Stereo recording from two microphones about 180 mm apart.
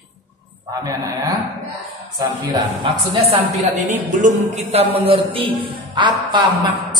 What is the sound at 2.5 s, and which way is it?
A woman's voice, 30° right (ahead or behind).